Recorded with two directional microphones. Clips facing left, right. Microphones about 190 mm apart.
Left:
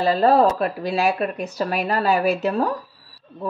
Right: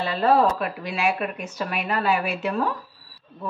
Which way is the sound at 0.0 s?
40° left (ahead or behind).